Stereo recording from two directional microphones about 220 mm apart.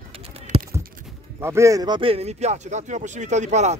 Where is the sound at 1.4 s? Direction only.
15° right (ahead or behind).